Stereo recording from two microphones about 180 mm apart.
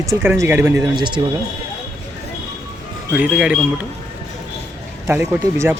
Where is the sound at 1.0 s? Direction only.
25° right (ahead or behind).